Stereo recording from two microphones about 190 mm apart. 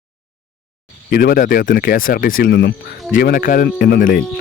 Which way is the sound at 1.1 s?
50° left (ahead or behind).